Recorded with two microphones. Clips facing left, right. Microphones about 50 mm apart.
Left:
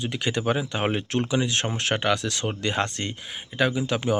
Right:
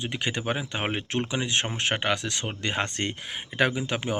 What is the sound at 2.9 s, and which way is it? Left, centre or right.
Speech, right.